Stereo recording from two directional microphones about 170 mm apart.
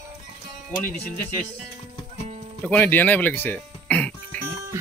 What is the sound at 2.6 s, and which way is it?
Music, 10° left (ahead or behind).